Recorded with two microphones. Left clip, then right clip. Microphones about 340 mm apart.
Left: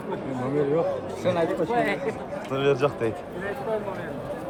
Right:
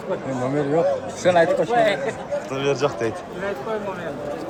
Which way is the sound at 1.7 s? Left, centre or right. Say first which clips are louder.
Right 6 dB; right.